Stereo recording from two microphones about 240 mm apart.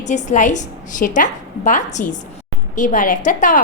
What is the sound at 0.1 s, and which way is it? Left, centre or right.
A woman's voice, left.